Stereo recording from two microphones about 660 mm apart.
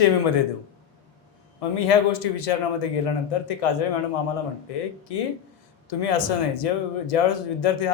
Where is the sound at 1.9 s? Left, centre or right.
Left.